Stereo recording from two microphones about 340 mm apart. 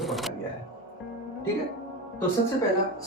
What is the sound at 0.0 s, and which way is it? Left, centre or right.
Music, centre.